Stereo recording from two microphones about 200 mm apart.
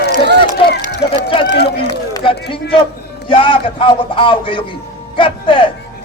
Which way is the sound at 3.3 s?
25° left (ahead or behind).